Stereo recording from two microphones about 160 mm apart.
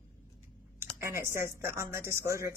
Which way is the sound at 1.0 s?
15° right (ahead or behind).